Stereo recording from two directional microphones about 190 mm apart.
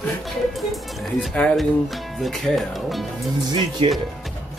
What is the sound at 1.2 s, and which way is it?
Speech, 5° left (ahead or behind).